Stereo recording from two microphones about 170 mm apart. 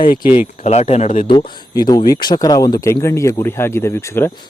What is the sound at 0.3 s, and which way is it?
Speech, 40° left (ahead or behind).